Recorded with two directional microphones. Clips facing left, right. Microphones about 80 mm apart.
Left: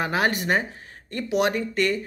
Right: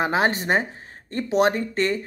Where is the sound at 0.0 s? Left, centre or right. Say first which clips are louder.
Right 2 dB; right.